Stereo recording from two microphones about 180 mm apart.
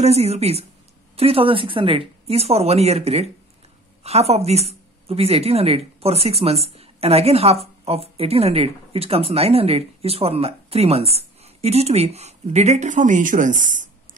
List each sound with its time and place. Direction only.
0.0 s speech: 35° right (ahead or behind)